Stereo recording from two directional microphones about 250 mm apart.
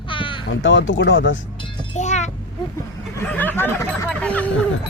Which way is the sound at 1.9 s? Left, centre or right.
Left.